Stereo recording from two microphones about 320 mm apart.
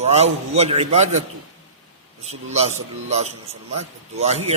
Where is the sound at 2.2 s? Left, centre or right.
Centre.